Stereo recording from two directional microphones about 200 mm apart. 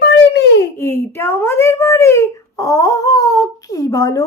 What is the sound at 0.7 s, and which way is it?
A child's voice, 10° left (ahead or behind).